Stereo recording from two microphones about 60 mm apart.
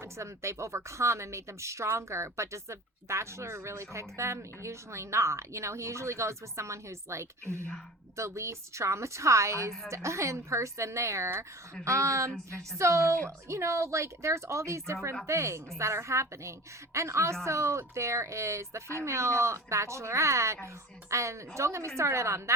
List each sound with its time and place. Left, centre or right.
0.0 s a woman's voice: right